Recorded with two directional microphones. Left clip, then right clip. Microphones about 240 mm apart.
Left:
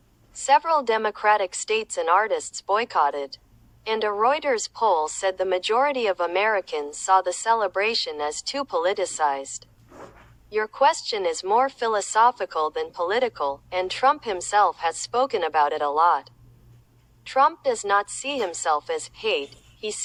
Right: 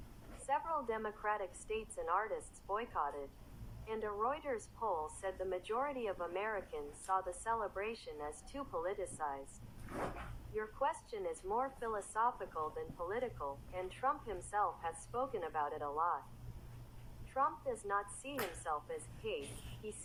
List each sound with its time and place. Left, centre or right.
0.4 s a woman's voice: left
17.2 s a woman's voice: left